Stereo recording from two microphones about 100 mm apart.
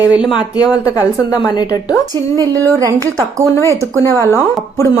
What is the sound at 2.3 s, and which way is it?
A woman's voice, 35° right (ahead or behind).